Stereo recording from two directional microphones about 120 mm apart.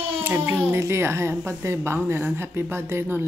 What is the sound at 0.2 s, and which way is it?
A woman's voice, 15° right (ahead or behind).